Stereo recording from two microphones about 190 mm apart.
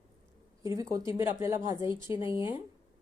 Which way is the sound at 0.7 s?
15° right (ahead or behind).